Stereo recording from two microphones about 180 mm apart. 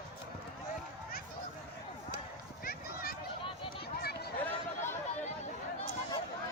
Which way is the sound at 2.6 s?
55° left (ahead or behind).